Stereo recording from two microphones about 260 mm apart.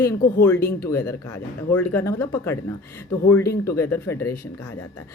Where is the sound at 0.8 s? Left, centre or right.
Centre.